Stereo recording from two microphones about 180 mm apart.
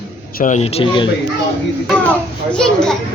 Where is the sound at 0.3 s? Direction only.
45° left (ahead or behind); by 1.1 s 30° left (ahead or behind).